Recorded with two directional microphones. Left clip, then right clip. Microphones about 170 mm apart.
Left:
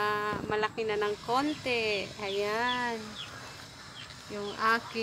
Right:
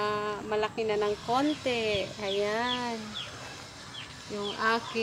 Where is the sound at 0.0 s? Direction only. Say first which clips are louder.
Even; centre (ahead or behind).